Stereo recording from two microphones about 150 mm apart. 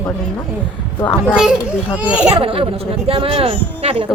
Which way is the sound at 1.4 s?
5° right (ahead or behind).